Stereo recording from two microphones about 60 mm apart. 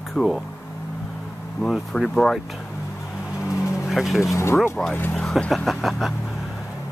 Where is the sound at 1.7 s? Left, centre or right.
Centre.